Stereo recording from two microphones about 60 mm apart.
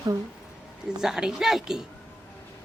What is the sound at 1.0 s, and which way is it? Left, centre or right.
Speech, centre.